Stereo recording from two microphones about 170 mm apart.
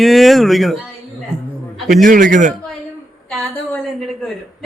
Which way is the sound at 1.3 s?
40° right (ahead or behind).